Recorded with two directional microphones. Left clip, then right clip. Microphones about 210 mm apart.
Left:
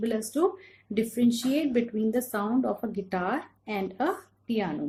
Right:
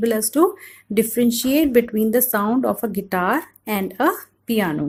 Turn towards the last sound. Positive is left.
turn(degrees=-50)  # may be behind; listen again after turning